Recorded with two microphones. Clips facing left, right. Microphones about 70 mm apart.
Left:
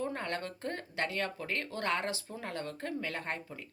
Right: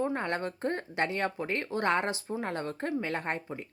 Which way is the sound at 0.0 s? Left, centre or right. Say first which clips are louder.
Right 5 dB; right.